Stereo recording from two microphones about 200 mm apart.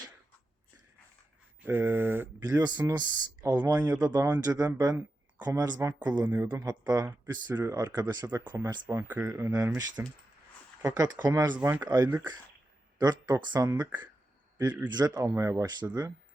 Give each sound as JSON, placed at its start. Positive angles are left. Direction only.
{"t": 1.6, "sound": "speech", "side_deg": -10}